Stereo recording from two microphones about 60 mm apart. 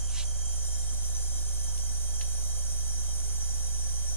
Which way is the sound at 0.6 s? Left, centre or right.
Left.